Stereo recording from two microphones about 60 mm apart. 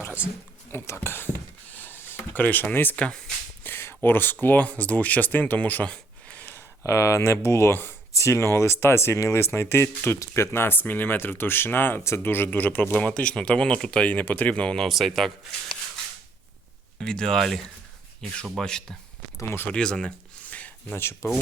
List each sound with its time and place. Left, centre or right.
0.9 s a sound: left
2.4 s speech: left
5.9 s a sound: left
6.8 s speech: left
8.1 s speech: left
13.0 s speech: centre
14.8 s a man's voice: centre
17.0 s speech: centre
18.6 s speech: centre
20.4 s a sound: left
20.9 s speech: left